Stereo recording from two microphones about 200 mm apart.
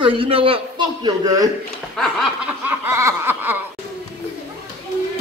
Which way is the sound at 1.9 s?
Centre (ahead or behind).